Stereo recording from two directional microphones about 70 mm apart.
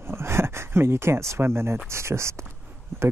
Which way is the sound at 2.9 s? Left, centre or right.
Right.